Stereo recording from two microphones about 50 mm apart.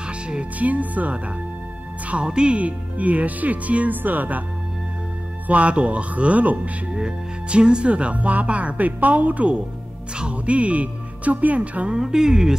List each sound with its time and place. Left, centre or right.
0.0 s speech: right
2.2 s speech: centre; by 4.4 s right
5.5 s speech: right
6.9 s speech: centre
12.0 s speech: centre